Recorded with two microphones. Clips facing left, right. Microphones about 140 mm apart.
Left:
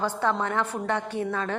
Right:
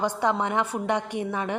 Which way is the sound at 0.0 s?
15° right (ahead or behind).